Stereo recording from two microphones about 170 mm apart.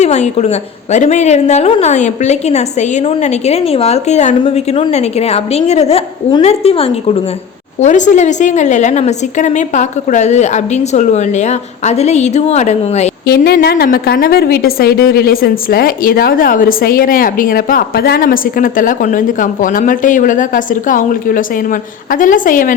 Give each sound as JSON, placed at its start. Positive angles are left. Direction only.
{"t": 0.0, "sound": "a woman's voice", "side_deg": 40}
{"t": 7.8, "sound": "a woman's voice", "side_deg": 45}
{"t": 13.2, "sound": "a woman's voice", "side_deg": 65}